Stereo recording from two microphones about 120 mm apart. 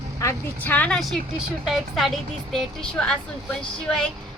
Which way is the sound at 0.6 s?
15° left (ahead or behind).